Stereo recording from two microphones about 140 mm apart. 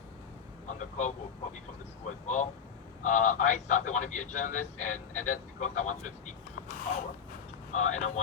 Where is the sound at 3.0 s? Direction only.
65° left (ahead or behind).